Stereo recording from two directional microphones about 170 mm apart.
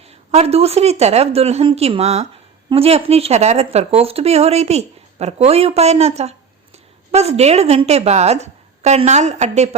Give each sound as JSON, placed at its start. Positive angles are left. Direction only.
{"t": 0.3, "sound": "speech", "side_deg": -40}